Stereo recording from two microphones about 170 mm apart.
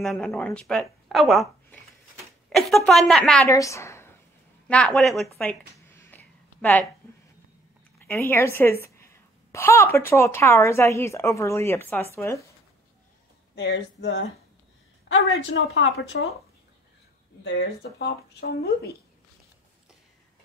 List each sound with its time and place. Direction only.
0.0 s a woman's voice: centre (ahead or behind)
2.5 s a woman's voice: centre (ahead or behind)
3.4 s a woman's voice: 20° left (ahead or behind)
5.9 s a sound: 15° left (ahead or behind)
8.0 s a woman's voice: 15° left (ahead or behind)
13.6 s speech: 90° left
17.4 s speech: 90° left; by 18.9 s 70° left (ahead or behind)